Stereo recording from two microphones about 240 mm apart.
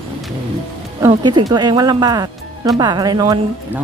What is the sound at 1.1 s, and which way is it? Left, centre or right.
Speech, centre.